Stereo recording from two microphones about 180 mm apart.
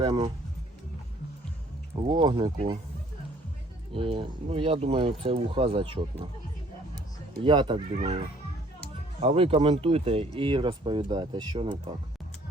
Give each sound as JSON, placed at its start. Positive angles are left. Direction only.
{"t": 2.0, "sound": "speech", "side_deg": -25}
{"t": 3.9, "sound": "speech", "side_deg": -30}
{"t": 7.4, "sound": "speech", "side_deg": -25}
{"t": 9.2, "sound": "speech", "side_deg": -35}